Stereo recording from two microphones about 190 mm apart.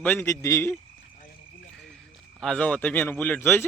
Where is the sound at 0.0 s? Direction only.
10° left (ahead or behind).